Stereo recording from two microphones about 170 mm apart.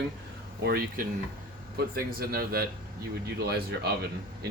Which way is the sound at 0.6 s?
65° right (ahead or behind).